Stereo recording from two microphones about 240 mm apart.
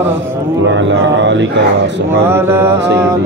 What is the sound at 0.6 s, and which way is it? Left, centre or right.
Speech, right.